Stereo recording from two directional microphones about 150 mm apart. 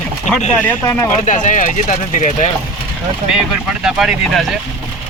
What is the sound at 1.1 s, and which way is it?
Speech, 55° left (ahead or behind).